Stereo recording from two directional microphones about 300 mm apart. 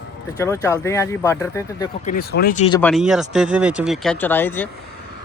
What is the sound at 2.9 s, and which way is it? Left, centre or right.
Speech, centre.